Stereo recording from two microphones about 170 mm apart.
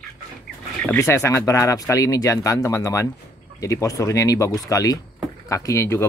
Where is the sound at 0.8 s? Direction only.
15° left (ahead or behind).